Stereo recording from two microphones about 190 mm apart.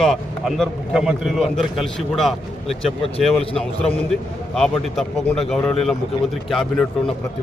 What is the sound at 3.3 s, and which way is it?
Speech, 30° left (ahead or behind).